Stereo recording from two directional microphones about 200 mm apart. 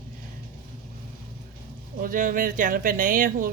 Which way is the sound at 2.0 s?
45° right (ahead or behind).